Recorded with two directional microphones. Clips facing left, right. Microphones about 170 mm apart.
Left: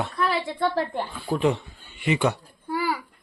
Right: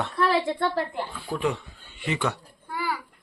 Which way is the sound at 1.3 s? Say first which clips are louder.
Left 5 dB; 25° left (ahead or behind).